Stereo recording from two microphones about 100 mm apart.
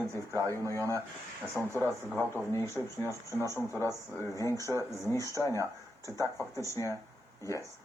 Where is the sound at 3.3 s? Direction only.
30° right (ahead or behind).